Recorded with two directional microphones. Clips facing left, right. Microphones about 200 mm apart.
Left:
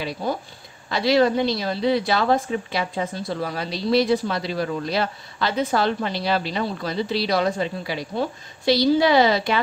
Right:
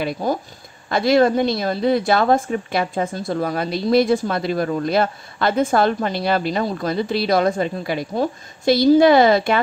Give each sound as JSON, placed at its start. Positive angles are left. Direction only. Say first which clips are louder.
{"t": 0.0, "sound": "a woman's voice", "louder": "right 4 dB", "side_deg": -45}